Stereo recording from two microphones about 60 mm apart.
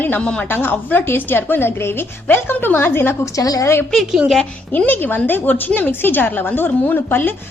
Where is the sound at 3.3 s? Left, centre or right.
Left.